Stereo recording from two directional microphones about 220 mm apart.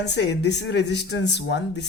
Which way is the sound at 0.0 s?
50° left (ahead or behind).